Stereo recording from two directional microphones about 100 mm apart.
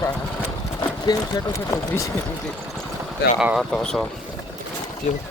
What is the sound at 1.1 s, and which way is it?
Speech, 40° left (ahead or behind).